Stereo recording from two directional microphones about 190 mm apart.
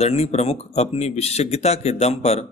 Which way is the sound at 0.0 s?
35° left (ahead or behind).